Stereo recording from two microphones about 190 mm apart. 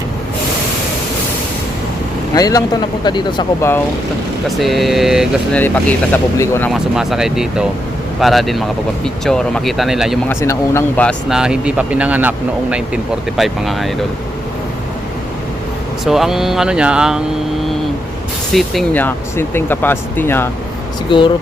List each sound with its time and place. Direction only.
2.3 s speech: 20° left (ahead or behind)
4.4 s speech: centre (ahead or behind)
5.5 s speech: 10° left (ahead or behind)
6.7 s speech: centre (ahead or behind)
10.2 s speech: 15° left (ahead or behind)
11.3 s speech: 5° right (ahead or behind)
16.0 s speech: centre (ahead or behind)
18.5 s speech: centre (ahead or behind)
21.1 s speech: 25° left (ahead or behind)